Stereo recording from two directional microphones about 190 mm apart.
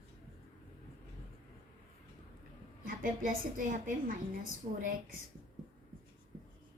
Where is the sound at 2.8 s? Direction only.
45° right (ahead or behind).